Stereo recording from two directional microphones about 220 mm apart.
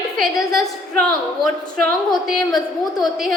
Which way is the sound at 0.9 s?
Centre (ahead or behind).